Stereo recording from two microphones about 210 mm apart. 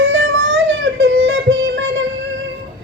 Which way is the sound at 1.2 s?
70° right (ahead or behind).